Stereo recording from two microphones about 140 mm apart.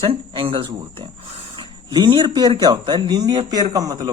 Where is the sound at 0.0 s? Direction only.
40° right (ahead or behind).